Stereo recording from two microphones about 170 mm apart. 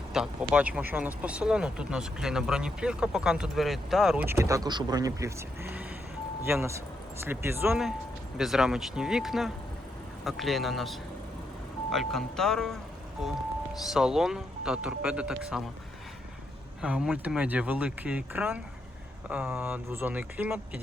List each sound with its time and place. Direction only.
0.1 s speech: 5° right (ahead or behind)
4.3 s speech: 15° right (ahead or behind)
8.4 s speech: centre (ahead or behind)
13.9 s speech: centre (ahead or behind)
16.8 s speech: 5° right (ahead or behind)